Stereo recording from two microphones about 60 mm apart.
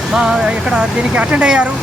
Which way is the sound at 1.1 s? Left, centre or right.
Centre.